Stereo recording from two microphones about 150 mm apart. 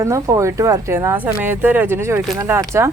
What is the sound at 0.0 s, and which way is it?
Speech, 20° right (ahead or behind).